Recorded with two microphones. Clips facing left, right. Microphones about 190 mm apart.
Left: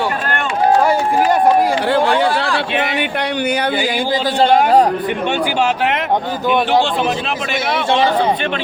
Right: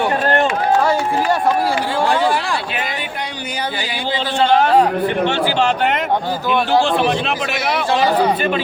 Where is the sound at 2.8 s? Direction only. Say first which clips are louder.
Left 6 dB; 70° left (ahead or behind); by 4.5 s 40° left (ahead or behind).